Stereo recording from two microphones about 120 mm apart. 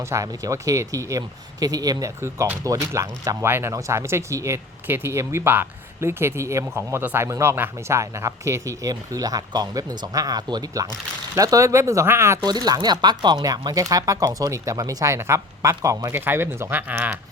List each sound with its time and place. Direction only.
0.0 s speech: 25° right (ahead or behind)
12.4 s speech: 35° right (ahead or behind); by 17.2 s 15° right (ahead or behind)